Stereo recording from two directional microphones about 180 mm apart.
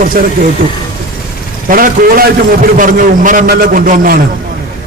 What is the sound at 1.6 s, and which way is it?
A man's voice, 50° right (ahead or behind).